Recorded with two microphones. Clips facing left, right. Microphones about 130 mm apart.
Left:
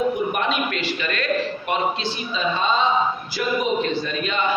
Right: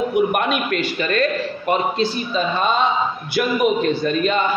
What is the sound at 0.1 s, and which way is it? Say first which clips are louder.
A man's voice: right 5 dB; 55° right (ahead or behind).